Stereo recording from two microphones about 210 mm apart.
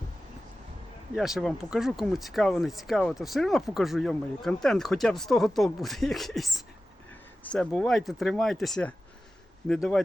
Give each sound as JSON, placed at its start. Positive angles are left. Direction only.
{"t": 1.1, "sound": "speech", "side_deg": 0}